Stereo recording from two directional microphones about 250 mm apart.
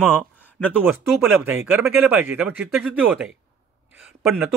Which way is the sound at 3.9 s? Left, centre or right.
Centre.